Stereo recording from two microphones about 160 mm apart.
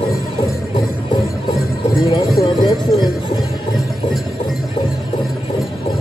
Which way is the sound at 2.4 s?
25° left (ahead or behind).